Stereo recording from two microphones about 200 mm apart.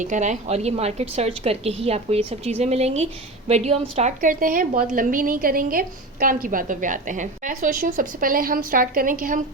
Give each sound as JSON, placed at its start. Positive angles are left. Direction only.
{"t": 0.0, "sound": "a woman's voice", "side_deg": -40}